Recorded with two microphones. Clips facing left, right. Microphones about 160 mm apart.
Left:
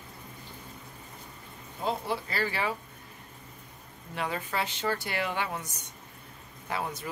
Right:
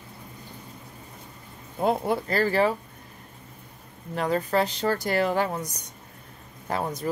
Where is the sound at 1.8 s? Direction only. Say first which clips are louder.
Right 7 dB; 50° right (ahead or behind).